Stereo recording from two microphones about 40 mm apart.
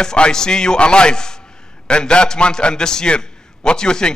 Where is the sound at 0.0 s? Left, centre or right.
Centre.